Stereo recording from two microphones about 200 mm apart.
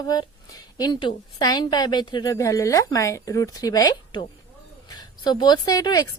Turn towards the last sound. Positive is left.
turn(degrees=20)  # may be behind; listen again after turning